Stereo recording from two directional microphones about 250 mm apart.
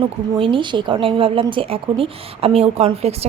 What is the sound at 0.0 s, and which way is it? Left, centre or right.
Speech, right.